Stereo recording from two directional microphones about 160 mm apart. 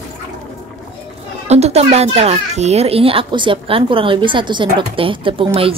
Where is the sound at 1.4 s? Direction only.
40° right (ahead or behind).